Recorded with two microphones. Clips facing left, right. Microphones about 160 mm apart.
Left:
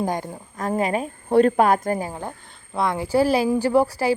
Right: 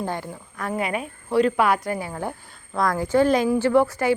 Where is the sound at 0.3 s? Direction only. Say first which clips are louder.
Left 1 dB; 25° left (ahead or behind).